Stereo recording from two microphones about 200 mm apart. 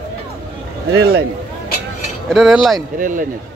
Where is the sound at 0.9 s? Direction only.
55° right (ahead or behind).